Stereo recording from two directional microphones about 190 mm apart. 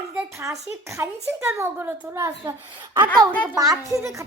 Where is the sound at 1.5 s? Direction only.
15° right (ahead or behind).